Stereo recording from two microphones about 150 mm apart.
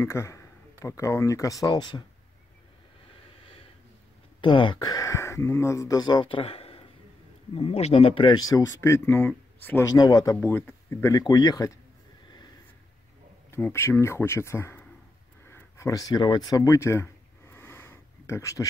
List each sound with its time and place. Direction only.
0.0 s speech: 20° left (ahead or behind)
4.4 s speech: 35° left (ahead or behind); by 9.8 s 10° left (ahead or behind)
9.8 s speech: 25° left (ahead or behind)
10.3 s speech: 15° left (ahead or behind)
13.5 s speech: 15° left (ahead or behind)
15.4 s a sound: 20° left (ahead or behind)